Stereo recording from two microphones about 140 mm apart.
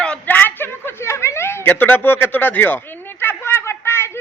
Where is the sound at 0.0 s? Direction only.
10° left (ahead or behind).